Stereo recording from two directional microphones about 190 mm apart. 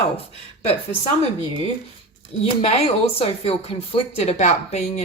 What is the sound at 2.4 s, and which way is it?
Speech, 35° left (ahead or behind).